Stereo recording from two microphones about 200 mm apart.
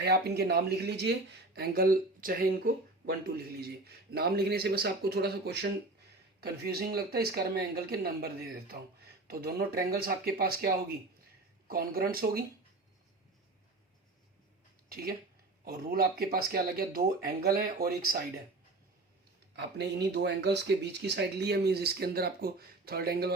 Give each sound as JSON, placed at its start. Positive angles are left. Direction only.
{"t": 0.0, "sound": "speech", "side_deg": -55}
{"t": 14.8, "sound": "speech", "side_deg": -50}
{"t": 19.5, "sound": "speech", "side_deg": -60}